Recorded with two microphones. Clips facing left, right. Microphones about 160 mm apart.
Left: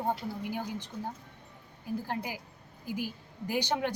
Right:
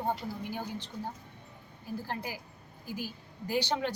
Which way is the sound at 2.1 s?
15° left (ahead or behind).